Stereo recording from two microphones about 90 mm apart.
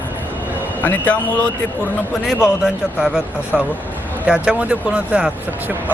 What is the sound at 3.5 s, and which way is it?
Speech, 5° left (ahead or behind).